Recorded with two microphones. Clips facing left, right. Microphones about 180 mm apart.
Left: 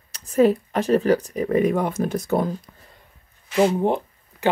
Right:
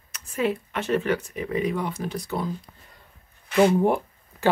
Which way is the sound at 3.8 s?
20° left (ahead or behind).